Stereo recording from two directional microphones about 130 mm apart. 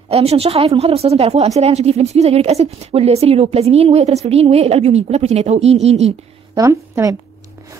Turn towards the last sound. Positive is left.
turn(degrees=-25)  # may be behind; listen again after turning